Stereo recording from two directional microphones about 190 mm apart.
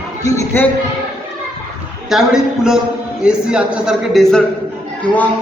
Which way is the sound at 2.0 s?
Centre (ahead or behind).